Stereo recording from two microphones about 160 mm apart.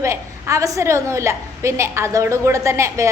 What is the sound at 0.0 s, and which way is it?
A woman's voice, 20° right (ahead or behind).